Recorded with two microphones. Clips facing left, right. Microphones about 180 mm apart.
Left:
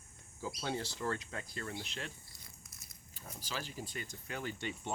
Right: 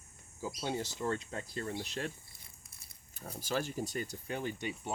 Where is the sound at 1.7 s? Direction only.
40° right (ahead or behind).